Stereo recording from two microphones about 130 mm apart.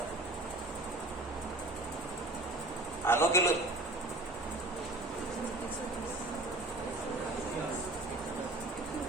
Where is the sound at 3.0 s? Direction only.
20° left (ahead or behind).